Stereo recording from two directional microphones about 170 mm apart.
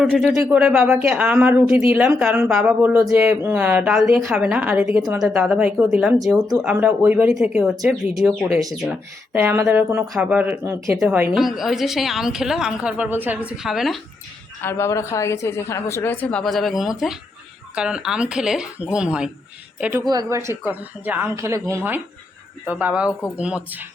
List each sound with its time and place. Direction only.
0.0 s speech: centre (ahead or behind)
11.3 s a woman's voice: centre (ahead or behind)
14.6 s a woman's voice: 15° left (ahead or behind)
16.2 s a woman's voice: 5° left (ahead or behind)